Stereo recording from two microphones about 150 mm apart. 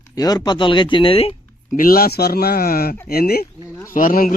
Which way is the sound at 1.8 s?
80° left.